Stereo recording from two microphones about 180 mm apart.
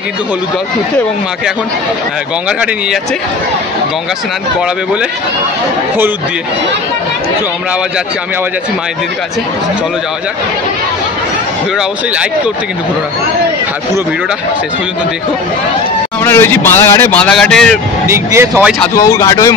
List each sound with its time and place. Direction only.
16.3 s speech: 15° left (ahead or behind)
18.0 s speech: 15° right (ahead or behind)
18.9 s speech: 20° left (ahead or behind)